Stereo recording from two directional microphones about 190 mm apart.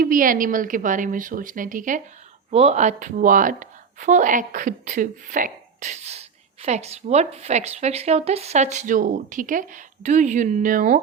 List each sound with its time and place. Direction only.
0.0 s a woman's voice: 45° right (ahead or behind)
2.5 s a woman's voice: 35° right (ahead or behind)